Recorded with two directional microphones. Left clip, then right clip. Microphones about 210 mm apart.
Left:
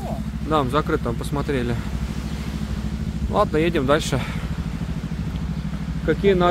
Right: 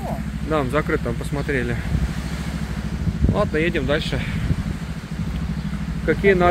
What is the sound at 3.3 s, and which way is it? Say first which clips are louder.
Speech: left 2 dB; 25° left (ahead or behind).